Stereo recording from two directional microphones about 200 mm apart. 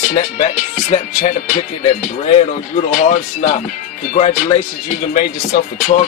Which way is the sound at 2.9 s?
35° left (ahead or behind).